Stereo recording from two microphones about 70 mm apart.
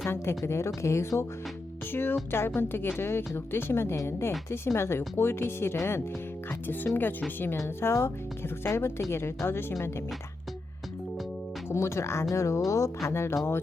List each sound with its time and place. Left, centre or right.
0.1 s speech: left
1.9 s speech: left
11.7 s speech: left